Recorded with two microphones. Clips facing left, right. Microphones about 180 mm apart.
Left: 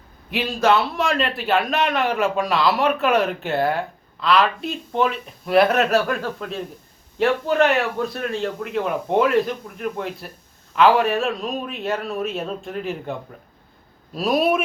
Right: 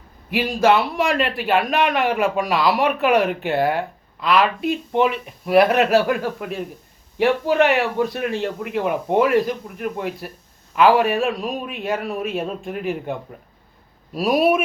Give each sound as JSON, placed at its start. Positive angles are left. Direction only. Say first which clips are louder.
{"t": 0.3, "sound": "speech", "louder": "right 2 dB", "side_deg": -10}